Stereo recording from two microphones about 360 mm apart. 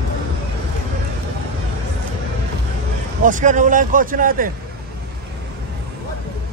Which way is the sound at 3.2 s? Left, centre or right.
Right.